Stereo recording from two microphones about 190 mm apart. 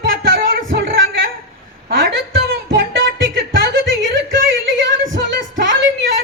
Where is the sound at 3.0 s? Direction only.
90° right.